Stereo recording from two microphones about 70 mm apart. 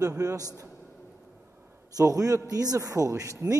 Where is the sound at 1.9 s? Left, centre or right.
Right.